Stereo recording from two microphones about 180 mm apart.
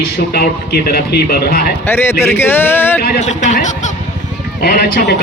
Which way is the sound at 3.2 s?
40° left (ahead or behind).